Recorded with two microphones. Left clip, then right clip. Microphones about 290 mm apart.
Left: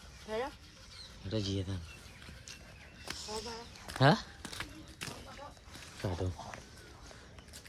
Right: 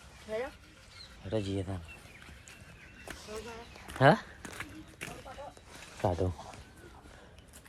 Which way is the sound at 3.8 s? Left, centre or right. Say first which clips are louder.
Right 4 dB; centre.